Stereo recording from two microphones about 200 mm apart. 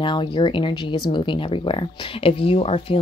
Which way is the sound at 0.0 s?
25° left (ahead or behind).